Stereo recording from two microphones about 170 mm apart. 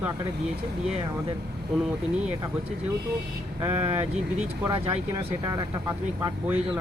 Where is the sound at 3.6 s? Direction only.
10° right (ahead or behind).